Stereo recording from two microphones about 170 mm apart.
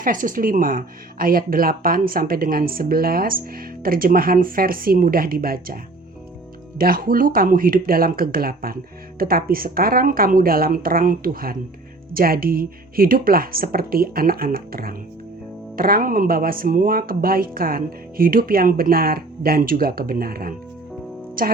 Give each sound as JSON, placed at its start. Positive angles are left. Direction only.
{"t": 0.0, "sound": "speech", "side_deg": -50}